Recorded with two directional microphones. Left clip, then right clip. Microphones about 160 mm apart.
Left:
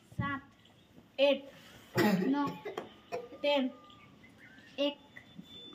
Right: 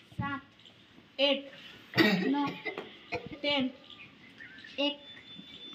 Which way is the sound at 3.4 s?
45° left (ahead or behind).